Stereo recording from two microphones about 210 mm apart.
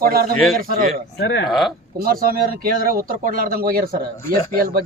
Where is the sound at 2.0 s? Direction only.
45° right (ahead or behind).